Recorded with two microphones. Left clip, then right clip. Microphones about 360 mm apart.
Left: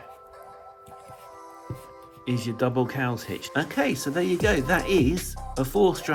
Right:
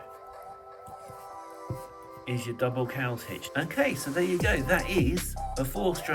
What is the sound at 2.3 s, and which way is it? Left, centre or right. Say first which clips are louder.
Speech: left 4 dB; centre.